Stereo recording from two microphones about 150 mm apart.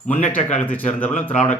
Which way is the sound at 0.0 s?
60° left (ahead or behind).